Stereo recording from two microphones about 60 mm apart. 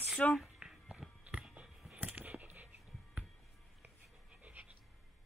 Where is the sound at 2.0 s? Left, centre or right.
Right.